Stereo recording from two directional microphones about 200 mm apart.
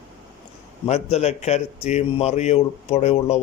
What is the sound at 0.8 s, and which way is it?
A man's voice, 30° left (ahead or behind).